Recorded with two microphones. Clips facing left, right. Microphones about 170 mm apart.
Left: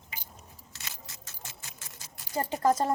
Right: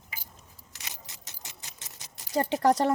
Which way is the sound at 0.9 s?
20° right (ahead or behind).